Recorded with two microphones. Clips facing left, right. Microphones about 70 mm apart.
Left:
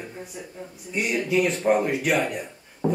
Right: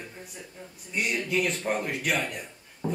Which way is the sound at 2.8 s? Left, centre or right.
Left.